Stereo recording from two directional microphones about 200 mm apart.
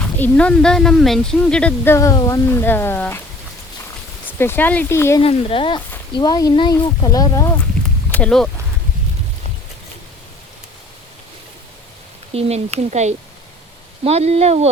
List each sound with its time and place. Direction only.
0.0 s speech: 5° left (ahead or behind)
4.3 s speech: 10° left (ahead or behind)
5.2 s speech: 30° left (ahead or behind)
8.1 s speech: 5° left (ahead or behind)
12.3 s speech: 30° right (ahead or behind)